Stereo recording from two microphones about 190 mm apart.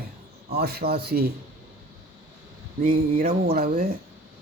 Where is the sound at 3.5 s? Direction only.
50° right (ahead or behind).